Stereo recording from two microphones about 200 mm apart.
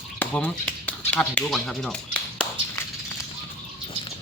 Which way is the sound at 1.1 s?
5° left (ahead or behind).